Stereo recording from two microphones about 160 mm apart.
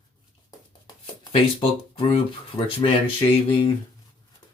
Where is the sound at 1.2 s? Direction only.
35° left (ahead or behind).